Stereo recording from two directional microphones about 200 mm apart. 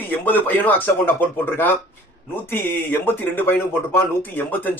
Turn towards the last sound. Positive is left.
turn(degrees=10)  # may be behind; listen again after turning